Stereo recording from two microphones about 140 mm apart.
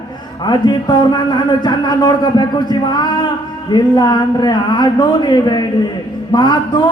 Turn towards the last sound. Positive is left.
turn(degrees=30)  # may be behind; listen again after turning